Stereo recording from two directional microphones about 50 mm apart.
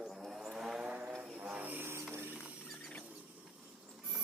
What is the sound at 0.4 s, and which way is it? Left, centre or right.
Vehicle, centre.